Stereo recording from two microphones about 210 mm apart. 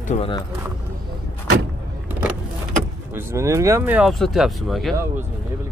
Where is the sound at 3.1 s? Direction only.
10° right (ahead or behind).